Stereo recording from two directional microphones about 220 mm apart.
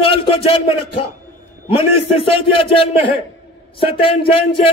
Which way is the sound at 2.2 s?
25° left (ahead or behind).